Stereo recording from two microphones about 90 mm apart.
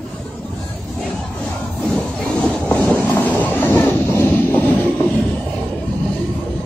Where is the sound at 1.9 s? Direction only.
10° left (ahead or behind).